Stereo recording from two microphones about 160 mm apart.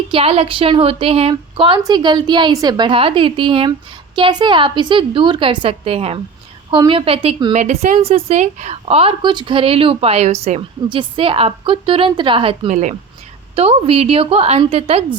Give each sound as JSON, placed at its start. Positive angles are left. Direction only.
{"t": 0.1, "sound": "a woman's voice", "side_deg": -35}
{"t": 7.5, "sound": "a woman's voice", "side_deg": -45}
{"t": 12.7, "sound": "a woman's voice", "side_deg": -50}
{"t": 13.6, "sound": "a woman's voice", "side_deg": -40}